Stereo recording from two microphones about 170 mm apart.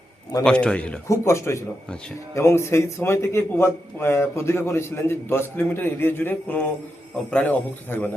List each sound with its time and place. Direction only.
0.4 s a man's voice: 5° left (ahead or behind)
1.0 s a man's voice: 15° left (ahead or behind)